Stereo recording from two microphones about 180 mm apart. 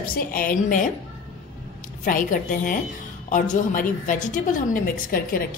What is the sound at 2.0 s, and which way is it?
A woman's voice, 50° left (ahead or behind).